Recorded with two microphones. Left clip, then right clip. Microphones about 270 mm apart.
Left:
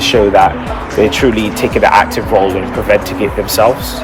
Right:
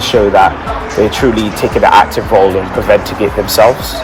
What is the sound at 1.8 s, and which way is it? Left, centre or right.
Speech, centre.